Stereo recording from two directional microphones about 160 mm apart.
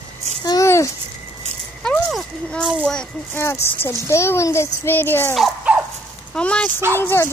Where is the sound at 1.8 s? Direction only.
5° left (ahead or behind).